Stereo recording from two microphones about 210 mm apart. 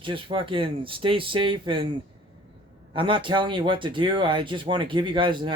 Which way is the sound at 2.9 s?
25° right (ahead or behind).